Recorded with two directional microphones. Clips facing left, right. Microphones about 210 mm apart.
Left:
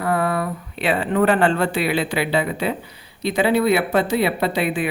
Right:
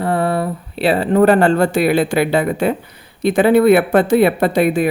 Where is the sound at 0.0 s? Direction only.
30° right (ahead or behind).